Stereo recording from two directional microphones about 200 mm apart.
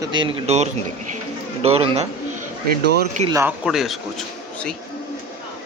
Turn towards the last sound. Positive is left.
turn(degrees=0)  # may be behind; listen again after turning